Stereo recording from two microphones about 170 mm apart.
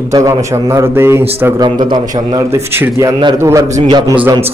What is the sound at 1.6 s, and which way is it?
A man's voice, 25° right (ahead or behind).